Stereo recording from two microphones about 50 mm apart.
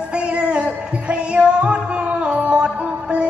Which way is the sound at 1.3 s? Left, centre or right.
Right.